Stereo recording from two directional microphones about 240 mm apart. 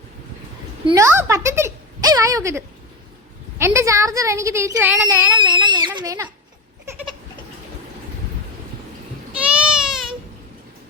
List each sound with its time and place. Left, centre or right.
0.9 s speech: centre
5.6 s a child's voice: centre
9.4 s baby cry: centre